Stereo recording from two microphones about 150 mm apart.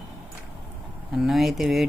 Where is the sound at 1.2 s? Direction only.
Centre (ahead or behind).